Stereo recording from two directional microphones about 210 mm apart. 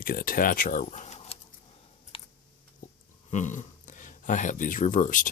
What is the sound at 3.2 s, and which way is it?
Speech, 35° left (ahead or behind).